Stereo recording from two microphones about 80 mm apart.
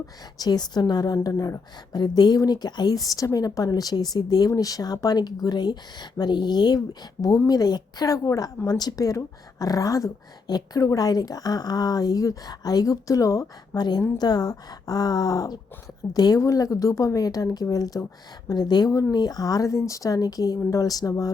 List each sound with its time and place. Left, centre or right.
0.3 s speech: left
1.3 s speech: left
3.1 s speech: left
14.2 s speech: left
16.4 s speech: left